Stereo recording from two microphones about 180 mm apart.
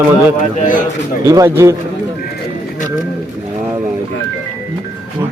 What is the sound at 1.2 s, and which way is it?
Speech, 20° right (ahead or behind).